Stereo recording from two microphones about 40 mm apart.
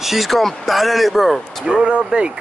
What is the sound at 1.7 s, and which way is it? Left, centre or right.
Speech, right.